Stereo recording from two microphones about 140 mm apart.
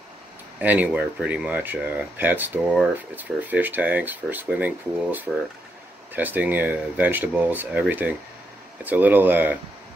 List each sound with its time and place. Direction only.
0.6 s speech: 10° right (ahead or behind)